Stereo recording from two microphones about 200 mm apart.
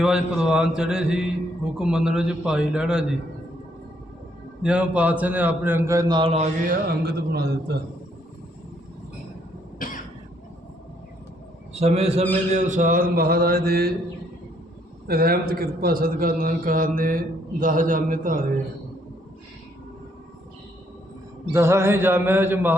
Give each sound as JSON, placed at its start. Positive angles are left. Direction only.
{"t": 0.0, "sound": "a man's voice", "side_deg": -5}
{"t": 4.6, "sound": "a man's voice", "side_deg": -5}
{"t": 9.7, "sound": "cough", "side_deg": 45}
{"t": 11.7, "sound": "a man's voice", "side_deg": -30}
{"t": 15.0, "sound": "a man's voice", "side_deg": -50}
{"t": 21.5, "sound": "a man's voice", "side_deg": -15}